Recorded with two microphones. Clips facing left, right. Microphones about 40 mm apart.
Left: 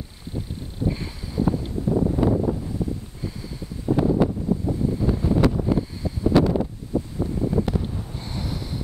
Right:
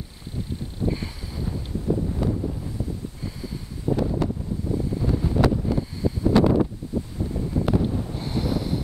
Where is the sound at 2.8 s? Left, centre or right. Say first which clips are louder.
Left 4 dB; left.